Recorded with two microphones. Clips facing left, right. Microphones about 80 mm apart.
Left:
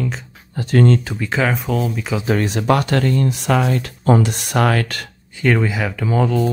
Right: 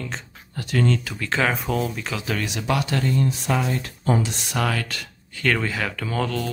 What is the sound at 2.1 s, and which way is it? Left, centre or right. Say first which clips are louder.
Speech: left 8 dB; left.